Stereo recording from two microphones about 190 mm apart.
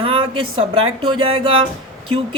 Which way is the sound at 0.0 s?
30° right (ahead or behind).